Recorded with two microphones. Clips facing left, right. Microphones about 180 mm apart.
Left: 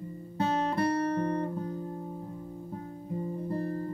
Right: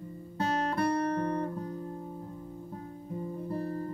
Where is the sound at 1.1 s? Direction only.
20° left (ahead or behind).